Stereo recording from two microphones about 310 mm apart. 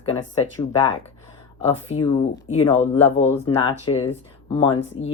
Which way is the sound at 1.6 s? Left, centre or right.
Centre.